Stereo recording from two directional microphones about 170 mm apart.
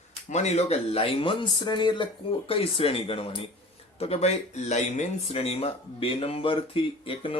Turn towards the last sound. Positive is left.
turn(degrees=30)  # may be behind; listen again after turning